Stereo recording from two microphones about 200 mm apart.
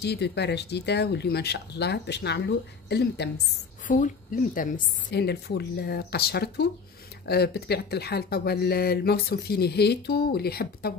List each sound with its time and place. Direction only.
0.0 s speech: 55° left (ahead or behind)
3.8 s speech: 40° left (ahead or behind)